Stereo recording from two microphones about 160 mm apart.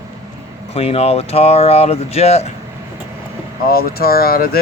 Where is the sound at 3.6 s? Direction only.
70° left (ahead or behind).